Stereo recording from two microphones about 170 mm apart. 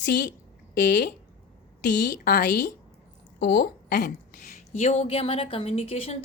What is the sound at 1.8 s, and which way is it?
A woman's voice, 75° left (ahead or behind).